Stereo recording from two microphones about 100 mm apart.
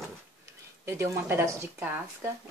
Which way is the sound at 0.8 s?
25° right (ahead or behind).